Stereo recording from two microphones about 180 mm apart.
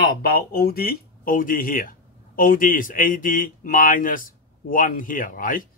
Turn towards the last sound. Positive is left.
turn(degrees=50)  # may be behind; listen again after turning